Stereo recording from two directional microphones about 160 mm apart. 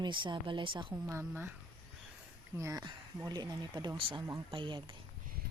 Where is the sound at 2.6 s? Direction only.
20° right (ahead or behind).